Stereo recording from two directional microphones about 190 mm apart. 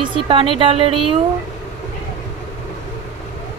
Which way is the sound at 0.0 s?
30° right (ahead or behind).